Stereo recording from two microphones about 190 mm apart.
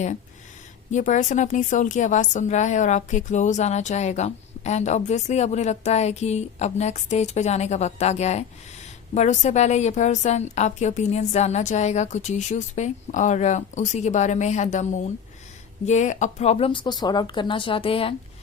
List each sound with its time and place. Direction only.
0.9 s a woman's voice: 40° left (ahead or behind)